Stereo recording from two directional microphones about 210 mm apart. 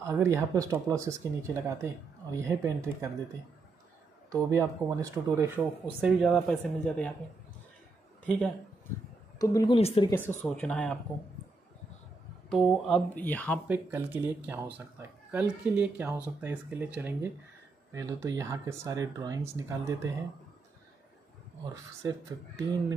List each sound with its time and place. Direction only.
0.0 s speech: 15° right (ahead or behind)
4.3 s speech: 15° right (ahead or behind); by 7.2 s 5° left (ahead or behind)
9.4 s speech: 15° left (ahead or behind)
9.8 s speech: 30° left (ahead or behind)
10.4 s speech: 5° left (ahead or behind)
12.4 s speech: centre (ahead or behind)
13.7 s speech: 10° right (ahead or behind)
22.6 s speech: 15° right (ahead or behind)